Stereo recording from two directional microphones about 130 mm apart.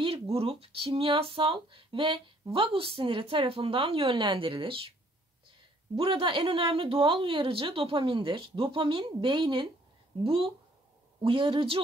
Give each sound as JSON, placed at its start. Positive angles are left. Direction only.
{"t": 0.0, "sound": "speech", "side_deg": -45}
{"t": 5.9, "sound": "speech", "side_deg": -45}